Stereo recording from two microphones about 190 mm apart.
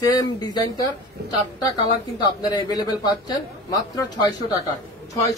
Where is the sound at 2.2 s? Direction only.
20° left (ahead or behind).